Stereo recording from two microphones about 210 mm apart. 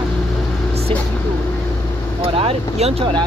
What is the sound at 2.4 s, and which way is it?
Speech, 30° right (ahead or behind).